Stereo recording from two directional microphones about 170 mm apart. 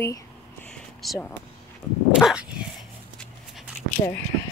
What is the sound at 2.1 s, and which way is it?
Dog, 5° right (ahead or behind).